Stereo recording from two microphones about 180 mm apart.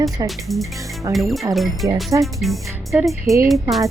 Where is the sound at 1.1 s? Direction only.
Centre (ahead or behind).